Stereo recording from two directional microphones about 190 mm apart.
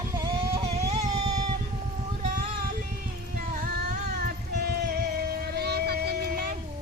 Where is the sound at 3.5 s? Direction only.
50° right (ahead or behind).